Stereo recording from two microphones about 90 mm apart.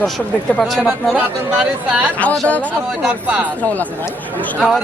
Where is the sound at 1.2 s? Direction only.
15° right (ahead or behind).